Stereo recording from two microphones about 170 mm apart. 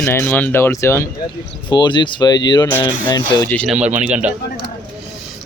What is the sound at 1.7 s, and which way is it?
Speech, 25° left (ahead or behind).